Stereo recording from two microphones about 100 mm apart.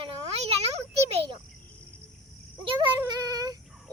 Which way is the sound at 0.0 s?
85° right.